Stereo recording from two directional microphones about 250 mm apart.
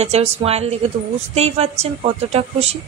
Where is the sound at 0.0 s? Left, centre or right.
Right.